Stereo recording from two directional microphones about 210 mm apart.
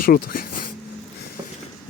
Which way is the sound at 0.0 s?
45° left (ahead or behind).